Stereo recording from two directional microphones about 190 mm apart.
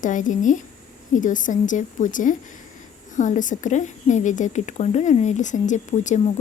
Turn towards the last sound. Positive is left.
turn(degrees=40)  # may be behind; listen again after turning